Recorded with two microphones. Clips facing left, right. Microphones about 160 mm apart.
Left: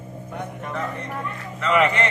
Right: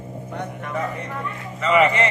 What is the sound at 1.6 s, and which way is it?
Speech, centre (ahead or behind).